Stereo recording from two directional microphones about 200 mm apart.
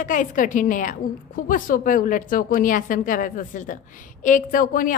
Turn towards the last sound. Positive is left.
turn(degrees=45)  # may be behind; listen again after turning